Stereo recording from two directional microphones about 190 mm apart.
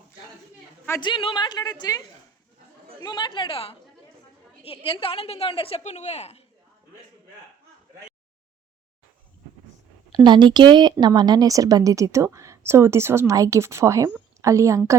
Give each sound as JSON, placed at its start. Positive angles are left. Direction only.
{"t": 1.0, "sound": "a woman's voice", "side_deg": 25}
{"t": 10.1, "sound": "a woman's voice", "side_deg": -20}